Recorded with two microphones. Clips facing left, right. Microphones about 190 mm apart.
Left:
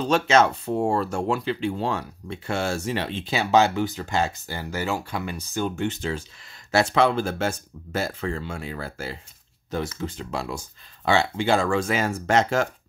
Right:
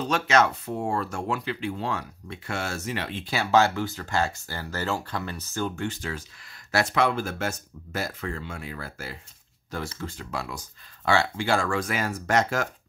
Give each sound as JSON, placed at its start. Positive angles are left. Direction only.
{"t": 0.1, "sound": "speech", "side_deg": 30}